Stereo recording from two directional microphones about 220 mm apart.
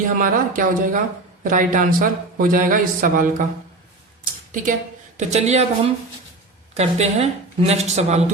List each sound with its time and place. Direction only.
0.0 s speech: 40° right (ahead or behind)
5.1 s speech: 30° right (ahead or behind)